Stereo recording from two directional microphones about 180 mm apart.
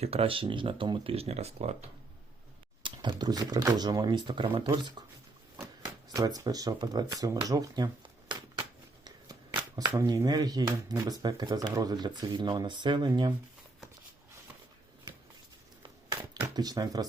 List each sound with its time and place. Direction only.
0.0 s speech: 35° right (ahead or behind)
2.8 s speech: 25° right (ahead or behind)
6.1 s speech: 20° right (ahead or behind)
9.0 s shuffling cards: 20° right (ahead or behind)
9.9 s speech: 15° right (ahead or behind)
16.3 s a sound: 20° right (ahead or behind)